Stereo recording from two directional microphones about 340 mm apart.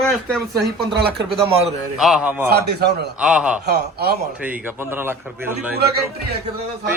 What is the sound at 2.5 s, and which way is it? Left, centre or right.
Speech, right.